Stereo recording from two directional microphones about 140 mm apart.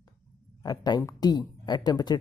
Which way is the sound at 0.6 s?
30° left (ahead or behind).